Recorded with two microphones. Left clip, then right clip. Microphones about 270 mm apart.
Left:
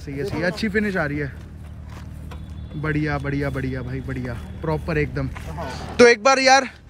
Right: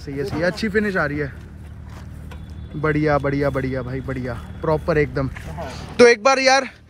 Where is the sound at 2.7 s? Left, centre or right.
Centre.